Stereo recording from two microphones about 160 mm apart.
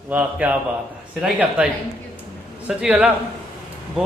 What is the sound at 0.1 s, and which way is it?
A man's voice, 10° right (ahead or behind).